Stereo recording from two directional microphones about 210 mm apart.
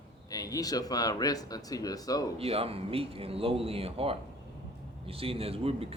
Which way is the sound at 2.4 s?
30° right (ahead or behind).